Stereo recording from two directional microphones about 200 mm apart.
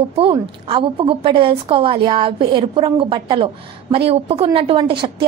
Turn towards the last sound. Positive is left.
turn(degrees=-25)  # may be behind; listen again after turning